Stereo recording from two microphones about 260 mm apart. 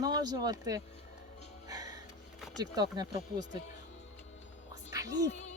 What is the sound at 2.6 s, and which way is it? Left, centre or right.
Speech, centre.